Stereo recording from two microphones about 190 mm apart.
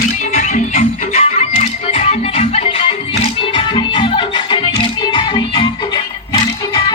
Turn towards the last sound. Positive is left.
turn(degrees=25)  # may be behind; listen again after turning